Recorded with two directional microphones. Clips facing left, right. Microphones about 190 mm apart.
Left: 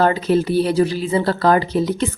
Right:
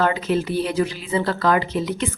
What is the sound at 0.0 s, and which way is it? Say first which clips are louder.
A woman's voice: left 4 dB; 35° left (ahead or behind).